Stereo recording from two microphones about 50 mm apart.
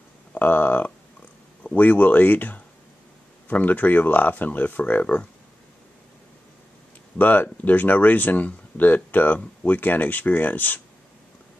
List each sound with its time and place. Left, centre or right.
0.3 s speech: left
7.2 s speech: left